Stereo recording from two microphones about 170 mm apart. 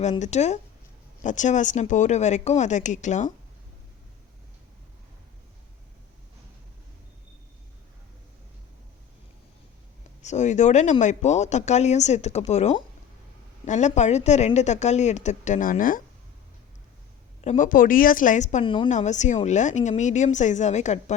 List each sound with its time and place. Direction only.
0.2 s speech: 40° left (ahead or behind)
10.2 s speech: 45° left (ahead or behind)
17.4 s speech: 45° left (ahead or behind)
18.6 s speech: 30° left (ahead or behind)
18.9 s speech: 45° left (ahead or behind)